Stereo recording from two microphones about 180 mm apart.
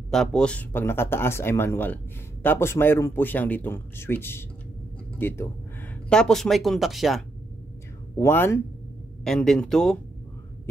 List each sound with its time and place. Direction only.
0.1 s speech: 5° left (ahead or behind)
8.2 s speech: 15° left (ahead or behind)
9.2 s speech: 5° left (ahead or behind)